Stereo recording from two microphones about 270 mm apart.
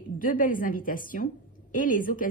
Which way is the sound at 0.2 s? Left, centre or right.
Left.